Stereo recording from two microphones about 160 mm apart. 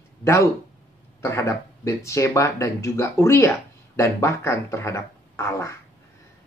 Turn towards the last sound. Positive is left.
turn(degrees=15)  # may be behind; listen again after turning